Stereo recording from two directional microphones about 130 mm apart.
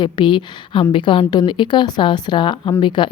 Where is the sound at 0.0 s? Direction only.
40° left (ahead or behind).